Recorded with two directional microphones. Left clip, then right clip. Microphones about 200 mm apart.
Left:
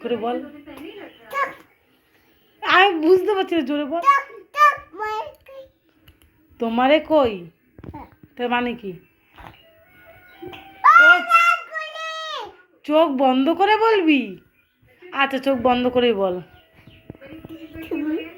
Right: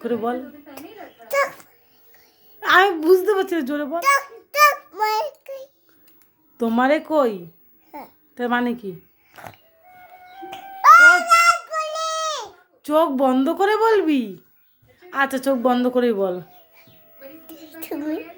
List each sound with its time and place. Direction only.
0.0 s a woman's voice: 30° right (ahead or behind)
1.3 s dog: 25° right (ahead or behind)
2.6 s a child's voice: 25° right (ahead or behind)
8.4 s speech: 25° right (ahead or behind)
10.8 s a sound: 25° right (ahead or behind)
12.8 s speech: 30° right (ahead or behind)
17.4 s a sound: 90° right